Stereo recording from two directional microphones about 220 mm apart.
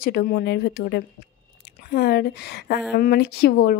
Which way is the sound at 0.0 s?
40° left (ahead or behind).